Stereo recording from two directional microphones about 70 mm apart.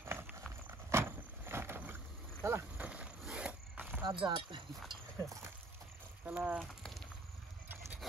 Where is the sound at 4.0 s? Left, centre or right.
Right.